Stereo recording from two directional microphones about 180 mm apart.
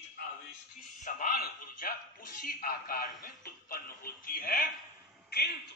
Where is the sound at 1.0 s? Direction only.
45° left (ahead or behind).